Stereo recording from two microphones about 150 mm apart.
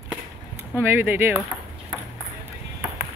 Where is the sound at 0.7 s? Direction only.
15° right (ahead or behind).